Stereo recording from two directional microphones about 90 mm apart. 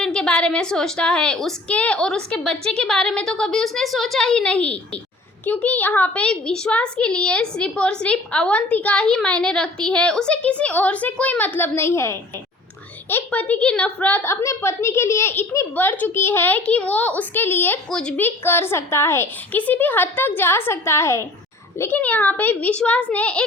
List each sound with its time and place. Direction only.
0.0 s a woman's voice: 10° left (ahead or behind); by 21.2 s 30° left (ahead or behind)
21.8 s a woman's voice: 20° left (ahead or behind)